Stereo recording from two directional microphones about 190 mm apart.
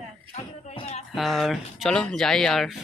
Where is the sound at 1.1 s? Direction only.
Centre (ahead or behind).